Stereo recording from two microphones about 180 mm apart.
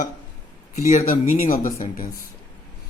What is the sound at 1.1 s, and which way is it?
Speech, 50° left (ahead or behind).